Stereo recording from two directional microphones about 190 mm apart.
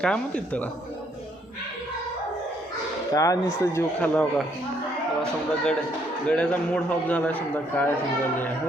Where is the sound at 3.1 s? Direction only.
15° left (ahead or behind).